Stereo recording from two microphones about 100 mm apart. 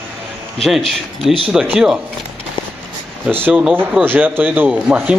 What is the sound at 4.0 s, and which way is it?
Speech, 20° right (ahead or behind).